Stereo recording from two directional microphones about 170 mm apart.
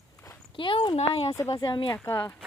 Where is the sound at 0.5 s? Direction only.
30° left (ahead or behind).